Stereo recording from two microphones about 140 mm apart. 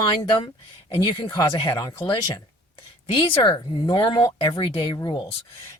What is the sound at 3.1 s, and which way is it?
Speech, 35° left (ahead or behind).